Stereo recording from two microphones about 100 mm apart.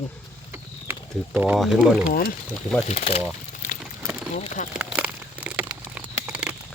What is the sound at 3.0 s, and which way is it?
Speech, 90° left.